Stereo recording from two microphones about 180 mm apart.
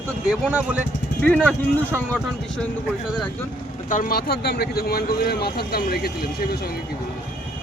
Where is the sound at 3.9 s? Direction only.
55° left (ahead or behind).